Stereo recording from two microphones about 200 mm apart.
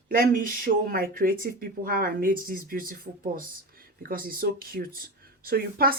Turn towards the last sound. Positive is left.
turn(degrees=-50)  # may be behind; listen again after turning